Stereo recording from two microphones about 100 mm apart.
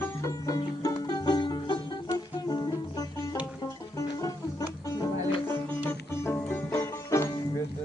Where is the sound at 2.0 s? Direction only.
40° left (ahead or behind).